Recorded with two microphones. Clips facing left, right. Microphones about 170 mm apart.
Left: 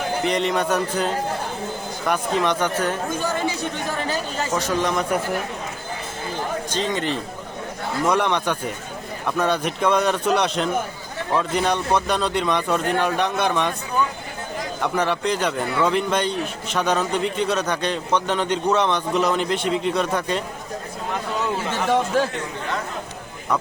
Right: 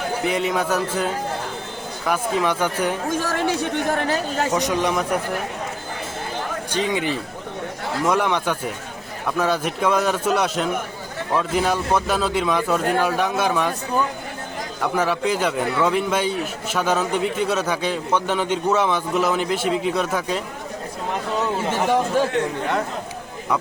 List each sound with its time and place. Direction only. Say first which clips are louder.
0.3 s speech: even; 5° right (ahead or behind)
3.1 s speech: right 2 dB; 80° right; by 4.4 s 65° right (ahead or behind)
4.5 s speech: left 1 dB; 15° right (ahead or behind)
6.7 s speech: right 4 dB; 10° right (ahead or behind)
14.8 s speech: right 1 dB; 5° right (ahead or behind)